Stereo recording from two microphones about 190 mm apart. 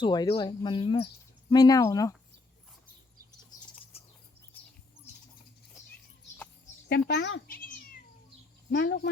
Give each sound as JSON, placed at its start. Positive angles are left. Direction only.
{"t": 0.0, "sound": "speech", "side_deg": 25}
{"t": 3.9, "sound": "bird", "side_deg": 30}
{"t": 4.5, "sound": "bird", "side_deg": 10}
{"t": 7.1, "sound": "speech", "side_deg": 70}
{"t": 7.4, "sound": "cat", "side_deg": 50}
{"t": 8.7, "sound": "speech", "side_deg": 60}